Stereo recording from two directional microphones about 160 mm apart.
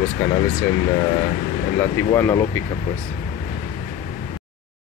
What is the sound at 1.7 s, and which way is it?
Speech, 15° left (ahead or behind).